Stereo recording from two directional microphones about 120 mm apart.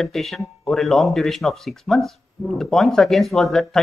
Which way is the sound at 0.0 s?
Centre (ahead or behind).